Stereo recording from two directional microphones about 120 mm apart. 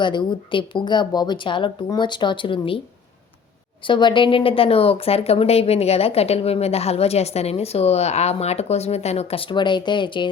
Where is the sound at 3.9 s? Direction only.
40° left (ahead or behind); by 9.4 s 65° left (ahead or behind).